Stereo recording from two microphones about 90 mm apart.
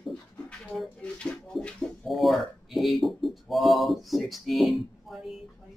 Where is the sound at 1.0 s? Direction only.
10° left (ahead or behind).